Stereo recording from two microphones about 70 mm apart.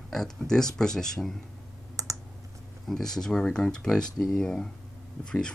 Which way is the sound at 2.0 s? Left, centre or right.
Right.